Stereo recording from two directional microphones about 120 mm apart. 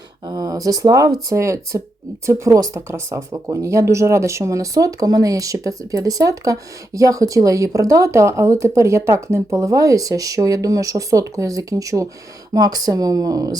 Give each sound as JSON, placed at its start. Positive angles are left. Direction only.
{"t": 0.3, "sound": "speech", "side_deg": -30}